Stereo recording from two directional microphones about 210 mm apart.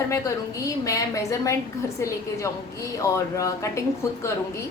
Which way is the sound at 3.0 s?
15° left (ahead or behind).